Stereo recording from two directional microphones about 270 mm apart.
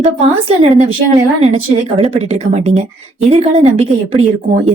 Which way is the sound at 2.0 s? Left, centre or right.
Right.